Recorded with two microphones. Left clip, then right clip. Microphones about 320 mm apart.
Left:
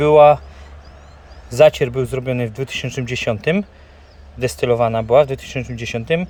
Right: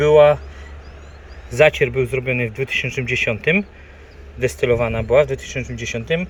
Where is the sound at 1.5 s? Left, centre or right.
Centre.